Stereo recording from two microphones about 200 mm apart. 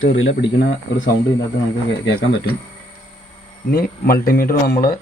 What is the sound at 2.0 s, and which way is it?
Speech, 55° left (ahead or behind).